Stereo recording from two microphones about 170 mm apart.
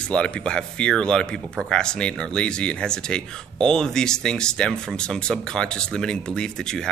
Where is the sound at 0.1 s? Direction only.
5° left (ahead or behind).